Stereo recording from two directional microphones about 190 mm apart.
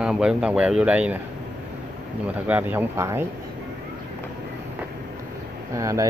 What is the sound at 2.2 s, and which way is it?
Speech, 10° right (ahead or behind).